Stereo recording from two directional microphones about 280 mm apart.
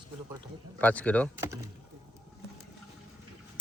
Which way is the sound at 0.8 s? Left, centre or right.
Centre.